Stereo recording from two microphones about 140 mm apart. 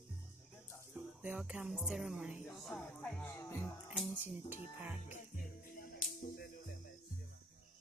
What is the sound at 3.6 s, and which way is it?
Music, 5° right (ahead or behind).